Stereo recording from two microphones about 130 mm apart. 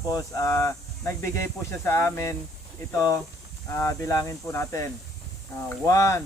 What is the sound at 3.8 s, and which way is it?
Speech, 25° left (ahead or behind).